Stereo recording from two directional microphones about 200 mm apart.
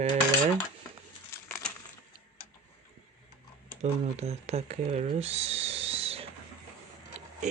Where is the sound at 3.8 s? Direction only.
30° right (ahead or behind).